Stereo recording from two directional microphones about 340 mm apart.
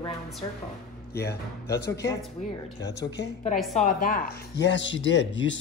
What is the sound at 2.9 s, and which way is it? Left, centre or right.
Speech, left.